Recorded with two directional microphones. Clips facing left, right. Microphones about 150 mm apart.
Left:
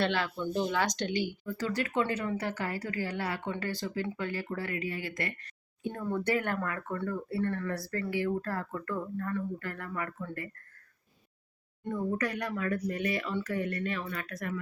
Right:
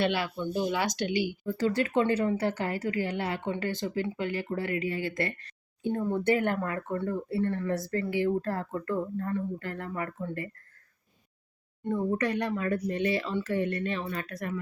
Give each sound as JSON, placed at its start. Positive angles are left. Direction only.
{"t": 0.0, "sound": "speech", "side_deg": -10}
{"t": 1.5, "sound": "speech", "side_deg": -30}
{"t": 11.9, "sound": "speech", "side_deg": -30}